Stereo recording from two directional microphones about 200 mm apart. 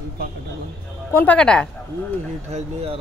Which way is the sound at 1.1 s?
10° left (ahead or behind).